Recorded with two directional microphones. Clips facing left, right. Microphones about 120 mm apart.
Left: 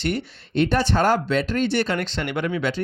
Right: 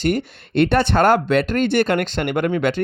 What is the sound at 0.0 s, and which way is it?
Speech, 45° right (ahead or behind).